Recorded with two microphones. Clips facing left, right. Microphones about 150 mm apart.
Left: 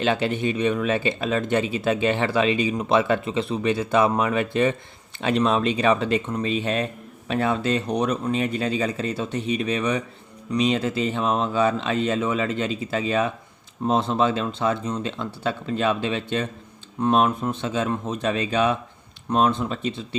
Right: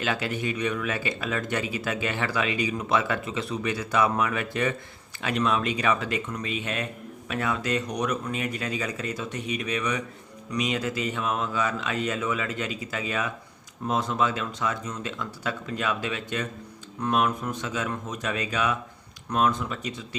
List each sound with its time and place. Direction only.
0.0 s speech: 25° left (ahead or behind)